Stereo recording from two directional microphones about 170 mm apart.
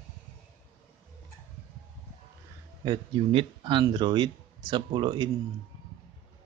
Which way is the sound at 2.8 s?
30° right (ahead or behind).